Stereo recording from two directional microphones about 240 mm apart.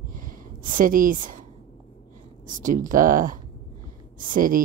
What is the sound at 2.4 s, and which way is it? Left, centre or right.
Speech, right.